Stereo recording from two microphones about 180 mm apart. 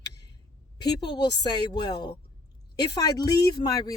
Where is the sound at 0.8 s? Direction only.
25° left (ahead or behind).